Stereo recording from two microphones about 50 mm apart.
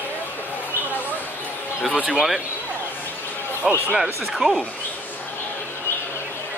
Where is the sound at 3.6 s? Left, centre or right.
Centre.